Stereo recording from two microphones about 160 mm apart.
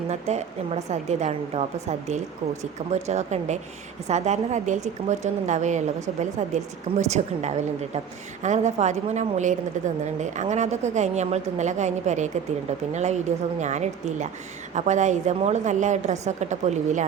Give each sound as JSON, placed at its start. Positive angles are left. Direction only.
{"t": 0.1, "sound": "a woman's voice", "side_deg": -45}